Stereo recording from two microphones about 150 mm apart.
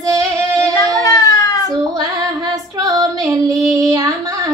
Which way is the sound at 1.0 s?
20° left (ahead or behind).